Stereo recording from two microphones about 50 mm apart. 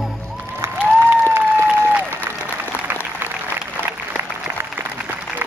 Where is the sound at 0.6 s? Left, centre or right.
Right.